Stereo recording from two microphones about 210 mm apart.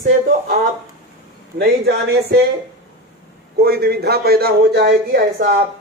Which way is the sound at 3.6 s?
50° right (ahead or behind).